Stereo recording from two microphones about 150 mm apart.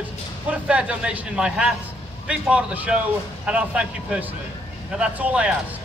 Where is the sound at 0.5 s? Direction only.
5° right (ahead or behind).